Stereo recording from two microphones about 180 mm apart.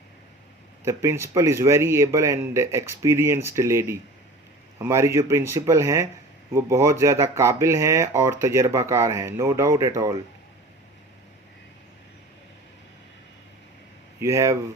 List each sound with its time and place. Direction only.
0.9 s speech: 15° right (ahead or behind)
14.2 s speech: 15° right (ahead or behind)